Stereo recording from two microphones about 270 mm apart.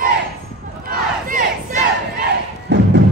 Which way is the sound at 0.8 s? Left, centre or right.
Right.